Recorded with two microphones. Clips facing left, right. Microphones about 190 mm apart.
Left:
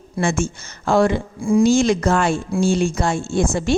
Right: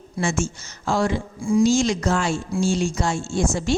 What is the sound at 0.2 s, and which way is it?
A woman's voice, 55° left (ahead or behind).